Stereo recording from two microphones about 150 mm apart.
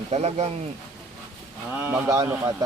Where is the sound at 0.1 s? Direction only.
45° right (ahead or behind).